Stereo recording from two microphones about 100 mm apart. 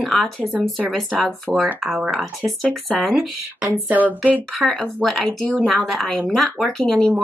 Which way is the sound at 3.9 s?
15° right (ahead or behind).